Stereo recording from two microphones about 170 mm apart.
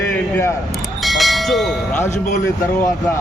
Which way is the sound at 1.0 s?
Centre (ahead or behind).